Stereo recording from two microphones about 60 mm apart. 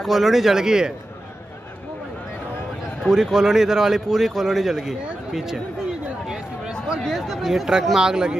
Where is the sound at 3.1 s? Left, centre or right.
Centre.